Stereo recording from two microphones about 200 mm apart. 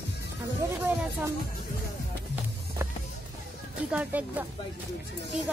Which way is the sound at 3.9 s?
10° right (ahead or behind).